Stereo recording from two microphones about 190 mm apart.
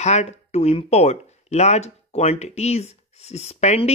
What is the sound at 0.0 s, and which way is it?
Speech, 35° left (ahead or behind).